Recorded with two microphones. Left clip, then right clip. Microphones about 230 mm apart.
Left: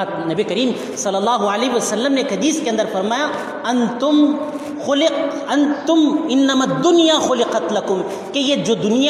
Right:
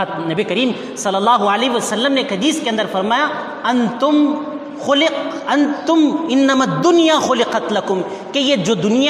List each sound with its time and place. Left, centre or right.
0.0 s a man's voice: right